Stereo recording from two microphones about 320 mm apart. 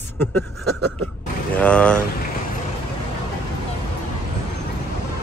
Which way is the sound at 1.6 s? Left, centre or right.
Centre.